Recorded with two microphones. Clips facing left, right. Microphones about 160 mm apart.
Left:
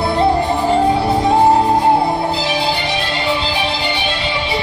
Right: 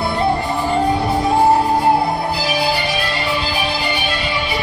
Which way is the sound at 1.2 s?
20° left (ahead or behind).